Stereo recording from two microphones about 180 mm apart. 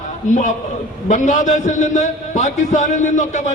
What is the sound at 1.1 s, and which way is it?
A man's voice, 45° left (ahead or behind).